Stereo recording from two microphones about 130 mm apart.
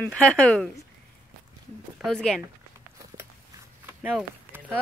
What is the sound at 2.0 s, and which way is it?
Speech, 5° left (ahead or behind).